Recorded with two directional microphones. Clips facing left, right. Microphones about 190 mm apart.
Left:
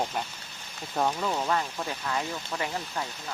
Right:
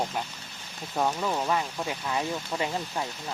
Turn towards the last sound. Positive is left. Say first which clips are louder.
# right 2 dB
turn(degrees=-20)  # may be behind; listen again after turning